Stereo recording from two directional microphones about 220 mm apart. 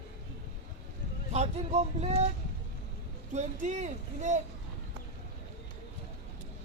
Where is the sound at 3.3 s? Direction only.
30° right (ahead or behind).